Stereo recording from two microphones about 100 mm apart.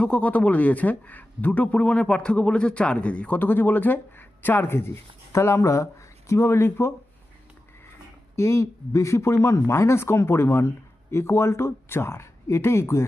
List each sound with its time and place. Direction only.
0.0 s a man's voice: 15° left (ahead or behind)
8.4 s speech: 30° left (ahead or behind)